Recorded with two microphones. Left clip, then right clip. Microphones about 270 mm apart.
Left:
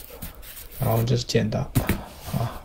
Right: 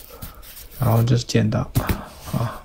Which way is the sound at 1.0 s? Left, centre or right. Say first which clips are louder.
Right 2 dB; centre.